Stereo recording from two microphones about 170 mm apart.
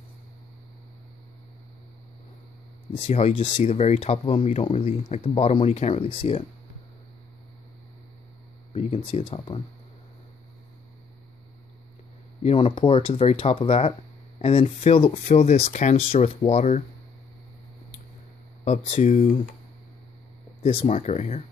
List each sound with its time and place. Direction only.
2.9 s speech: 40° left (ahead or behind)
8.7 s speech: 35° left (ahead or behind)
12.4 s speech: 35° left (ahead or behind)
18.6 s speech: 40° left (ahead or behind)
20.6 s speech: 40° left (ahead or behind)